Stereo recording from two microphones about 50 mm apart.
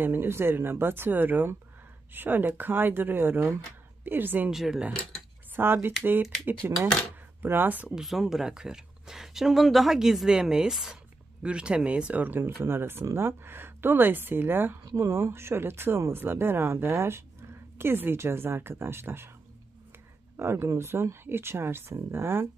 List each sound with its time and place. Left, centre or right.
0.0 s speech: right
4.5 s speech: centre
5.6 s speech: right
7.9 s speech: centre
11.4 s speech: right
15.0 s speech: right
17.7 s speech: right
20.3 s speech: right